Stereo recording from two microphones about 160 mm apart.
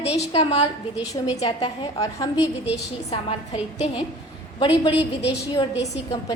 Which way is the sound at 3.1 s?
40° left (ahead or behind).